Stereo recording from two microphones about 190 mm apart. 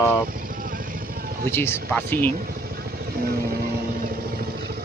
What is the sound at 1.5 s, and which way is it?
Speech, 15° left (ahead or behind).